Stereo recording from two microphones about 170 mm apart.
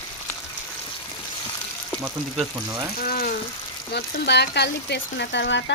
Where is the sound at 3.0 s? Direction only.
60° left (ahead or behind).